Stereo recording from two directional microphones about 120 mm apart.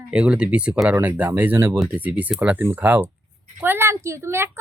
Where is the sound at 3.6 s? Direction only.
20° right (ahead or behind).